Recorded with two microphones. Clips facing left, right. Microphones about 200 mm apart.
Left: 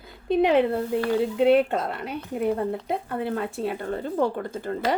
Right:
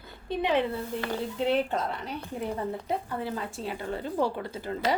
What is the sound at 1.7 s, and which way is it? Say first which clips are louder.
Speech: left 3 dB; 60° left (ahead or behind).